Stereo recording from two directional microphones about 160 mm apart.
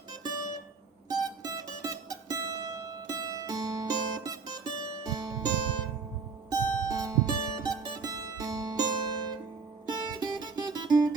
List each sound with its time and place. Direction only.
1.0 s mandolin: 25° right (ahead or behind)
5.0 s music: 20° right (ahead or behind)